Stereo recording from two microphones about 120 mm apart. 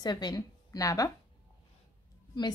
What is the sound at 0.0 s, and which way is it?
A woman's voice, 35° left (ahead or behind).